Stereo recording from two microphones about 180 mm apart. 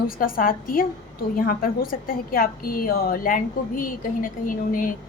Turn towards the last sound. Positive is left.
turn(degrees=50)  # may be behind; listen again after turning